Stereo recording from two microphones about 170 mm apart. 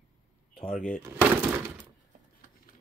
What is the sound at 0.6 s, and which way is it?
Speech, 5° left (ahead or behind).